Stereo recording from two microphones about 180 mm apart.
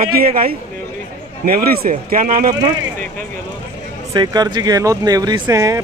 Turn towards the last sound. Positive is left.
turn(degrees=-20)  # may be behind; listen again after turning